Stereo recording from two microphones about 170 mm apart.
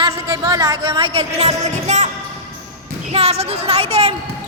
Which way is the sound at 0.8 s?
35° right (ahead or behind).